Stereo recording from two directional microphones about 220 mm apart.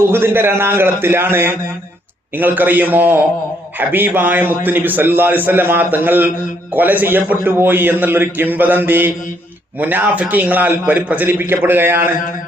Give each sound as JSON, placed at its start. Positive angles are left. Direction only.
{"t": 0.1, "sound": "a man's voice", "side_deg": -10}